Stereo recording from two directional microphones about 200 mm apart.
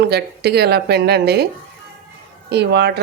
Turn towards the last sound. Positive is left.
turn(degrees=-55)  # may be behind; listen again after turning